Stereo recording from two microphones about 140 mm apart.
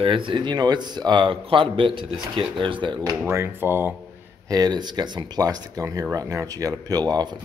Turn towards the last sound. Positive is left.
turn(degrees=-30)  # may be behind; listen again after turning